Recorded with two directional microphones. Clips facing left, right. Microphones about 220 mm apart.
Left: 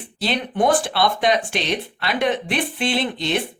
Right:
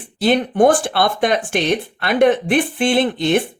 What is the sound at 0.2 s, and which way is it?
Speech, 50° right (ahead or behind).